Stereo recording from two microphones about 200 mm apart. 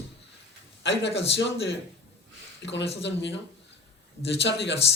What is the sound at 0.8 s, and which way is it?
A man's voice, 60° left (ahead or behind).